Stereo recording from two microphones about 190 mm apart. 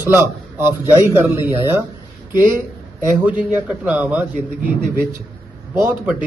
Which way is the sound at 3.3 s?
10° right (ahead or behind).